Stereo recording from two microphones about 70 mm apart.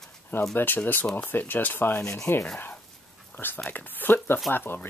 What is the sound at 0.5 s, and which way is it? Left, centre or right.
Speech, left.